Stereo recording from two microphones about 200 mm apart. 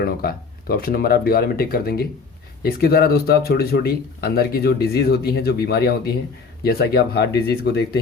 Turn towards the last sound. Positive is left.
turn(degrees=55)  # may be behind; listen again after turning